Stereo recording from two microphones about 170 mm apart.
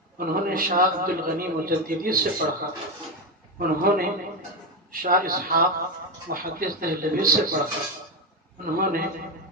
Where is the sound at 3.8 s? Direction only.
55° right (ahead or behind).